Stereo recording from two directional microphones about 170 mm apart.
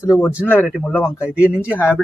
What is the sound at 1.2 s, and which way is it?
Speech, 5° right (ahead or behind).